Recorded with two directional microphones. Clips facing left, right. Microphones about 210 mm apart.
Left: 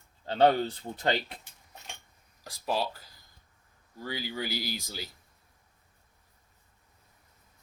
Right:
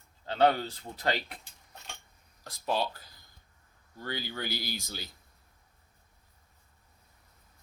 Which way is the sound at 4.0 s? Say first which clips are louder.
Left 2 dB; 10° left (ahead or behind).